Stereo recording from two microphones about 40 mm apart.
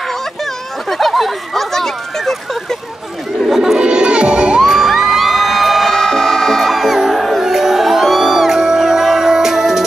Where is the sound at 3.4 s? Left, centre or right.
Centre.